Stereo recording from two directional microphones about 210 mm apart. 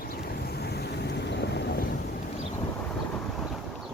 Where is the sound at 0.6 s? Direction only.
50° left (ahead or behind).